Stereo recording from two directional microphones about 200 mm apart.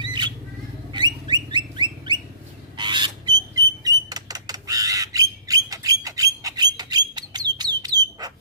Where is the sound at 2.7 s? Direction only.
20° right (ahead or behind).